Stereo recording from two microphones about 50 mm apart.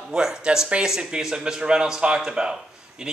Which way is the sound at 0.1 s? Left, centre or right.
Centre.